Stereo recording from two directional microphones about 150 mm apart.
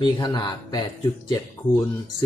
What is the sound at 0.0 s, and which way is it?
Speech, 30° left (ahead or behind).